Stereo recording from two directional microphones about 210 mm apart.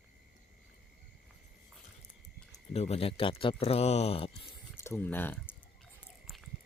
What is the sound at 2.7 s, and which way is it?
Speech, 30° left (ahead or behind).